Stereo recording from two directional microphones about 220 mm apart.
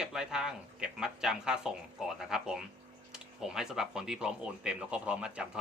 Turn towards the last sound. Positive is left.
turn(degrees=-5)  # may be behind; listen again after turning